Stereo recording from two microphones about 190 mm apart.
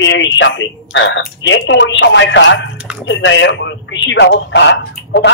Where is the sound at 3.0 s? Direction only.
80° left.